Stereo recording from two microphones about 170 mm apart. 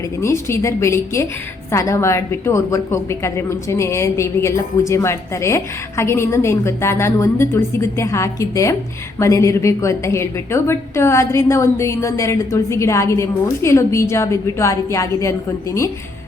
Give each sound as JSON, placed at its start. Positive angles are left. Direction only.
{"t": 0.2, "sound": "a woman's voice", "side_deg": 15}